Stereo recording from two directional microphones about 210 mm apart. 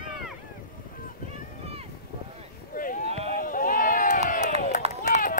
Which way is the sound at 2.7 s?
40° left (ahead or behind).